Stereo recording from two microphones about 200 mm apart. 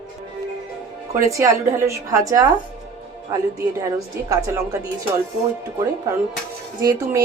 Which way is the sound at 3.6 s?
15° right (ahead or behind).